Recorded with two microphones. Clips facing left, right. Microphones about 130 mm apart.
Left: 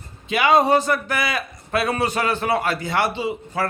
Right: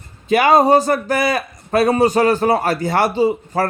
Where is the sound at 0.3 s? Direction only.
45° right (ahead or behind).